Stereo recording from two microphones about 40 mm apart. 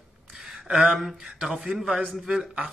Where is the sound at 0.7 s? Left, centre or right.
Centre.